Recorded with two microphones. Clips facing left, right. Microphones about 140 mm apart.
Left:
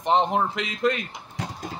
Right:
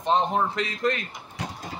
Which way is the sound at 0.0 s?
20° left (ahead or behind).